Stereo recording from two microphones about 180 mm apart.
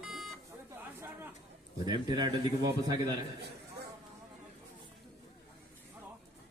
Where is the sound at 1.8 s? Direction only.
25° right (ahead or behind).